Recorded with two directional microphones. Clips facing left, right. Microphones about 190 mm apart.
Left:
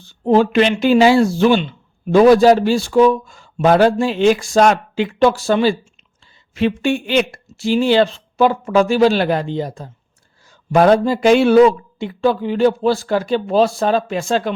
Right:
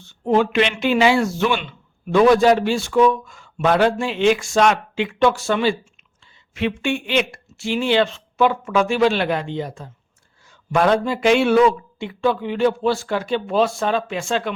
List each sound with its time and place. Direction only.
0.0 s speech: 35° left (ahead or behind)